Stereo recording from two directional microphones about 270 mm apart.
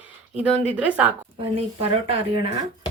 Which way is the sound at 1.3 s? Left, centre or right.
Right.